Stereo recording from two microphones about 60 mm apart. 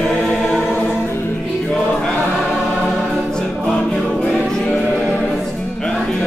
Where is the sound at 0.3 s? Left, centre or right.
Left.